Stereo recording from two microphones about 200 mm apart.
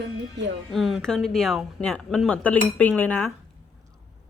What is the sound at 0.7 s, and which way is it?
Speech, centre (ahead or behind).